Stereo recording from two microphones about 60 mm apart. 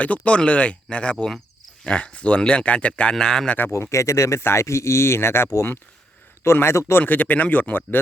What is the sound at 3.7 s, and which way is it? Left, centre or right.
Speech, left.